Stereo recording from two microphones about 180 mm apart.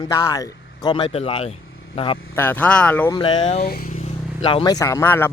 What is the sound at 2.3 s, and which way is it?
Speech, 10° left (ahead or behind).